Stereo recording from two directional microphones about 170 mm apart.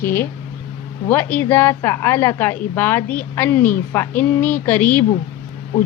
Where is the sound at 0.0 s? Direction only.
15° left (ahead or behind).